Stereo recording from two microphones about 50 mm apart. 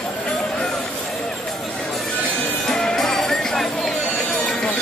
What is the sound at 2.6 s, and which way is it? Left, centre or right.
Music, centre.